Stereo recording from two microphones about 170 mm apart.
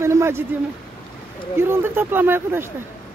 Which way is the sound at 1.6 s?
15° right (ahead or behind).